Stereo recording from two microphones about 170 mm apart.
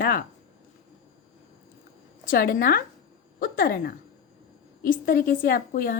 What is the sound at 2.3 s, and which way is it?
A woman's voice, 55° left (ahead or behind).